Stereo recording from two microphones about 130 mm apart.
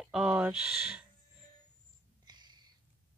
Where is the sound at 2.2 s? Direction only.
35° right (ahead or behind).